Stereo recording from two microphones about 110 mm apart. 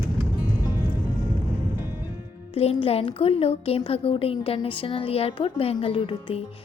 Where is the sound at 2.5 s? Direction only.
65° left (ahead or behind).